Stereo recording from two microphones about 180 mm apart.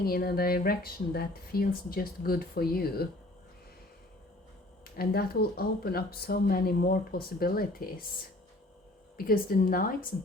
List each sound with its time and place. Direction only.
0.0 s speech: 60° left (ahead or behind)
4.9 s speech: 60° left (ahead or behind)
9.1 s a woman's voice: 55° left (ahead or behind)